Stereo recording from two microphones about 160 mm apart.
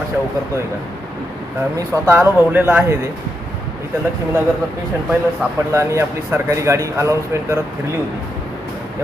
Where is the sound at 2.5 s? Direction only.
10° right (ahead or behind).